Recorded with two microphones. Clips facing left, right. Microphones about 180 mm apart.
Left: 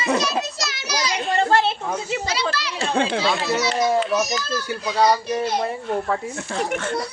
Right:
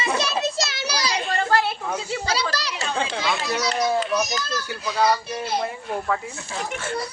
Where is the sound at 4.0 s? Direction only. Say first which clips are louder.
Left 2 dB; 5° left (ahead or behind).